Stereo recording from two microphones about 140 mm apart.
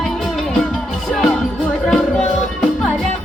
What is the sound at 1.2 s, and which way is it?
Music, 5° left (ahead or behind).